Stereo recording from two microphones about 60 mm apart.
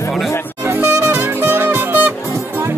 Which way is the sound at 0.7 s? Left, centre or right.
Right.